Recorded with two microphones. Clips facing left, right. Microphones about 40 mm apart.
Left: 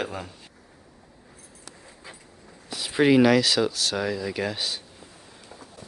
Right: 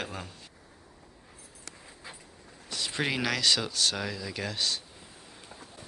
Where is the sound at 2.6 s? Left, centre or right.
Centre.